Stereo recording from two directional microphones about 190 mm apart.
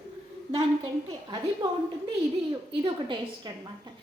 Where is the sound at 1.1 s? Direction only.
20° right (ahead or behind).